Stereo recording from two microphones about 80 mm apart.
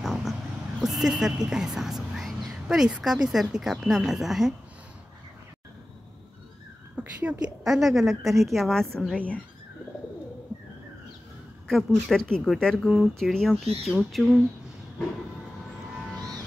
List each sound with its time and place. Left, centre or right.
0.0 s a sound: centre
3.0 s a woman's voice: centre
7.0 s speech: centre
7.6 s a woman's voice: centre
11.6 s speech: centre
12.8 s a woman's voice: centre